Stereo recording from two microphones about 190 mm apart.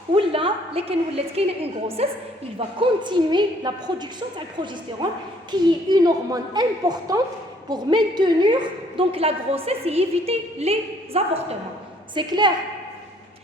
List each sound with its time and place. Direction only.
0.1 s a woman's voice: 25° right (ahead or behind)